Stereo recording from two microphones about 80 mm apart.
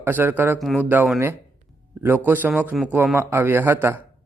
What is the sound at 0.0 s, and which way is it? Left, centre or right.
Speech, right.